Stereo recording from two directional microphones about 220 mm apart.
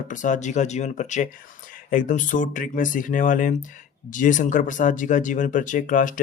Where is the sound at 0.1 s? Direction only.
35° left (ahead or behind).